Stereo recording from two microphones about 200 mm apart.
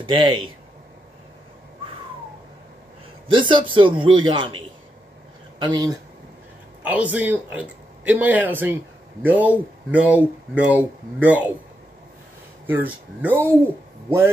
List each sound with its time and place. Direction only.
0.0 s a man's voice: 25° right (ahead or behind)
3.3 s a man's voice: 25° right (ahead or behind)
6.8 s speech: 10° right (ahead or behind)
12.6 s speech: 10° right (ahead or behind)